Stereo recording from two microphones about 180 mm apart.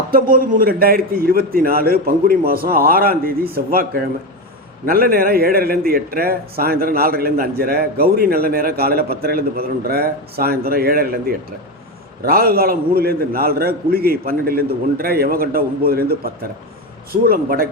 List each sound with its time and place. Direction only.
0.1 s a man's voice: 55° right (ahead or behind)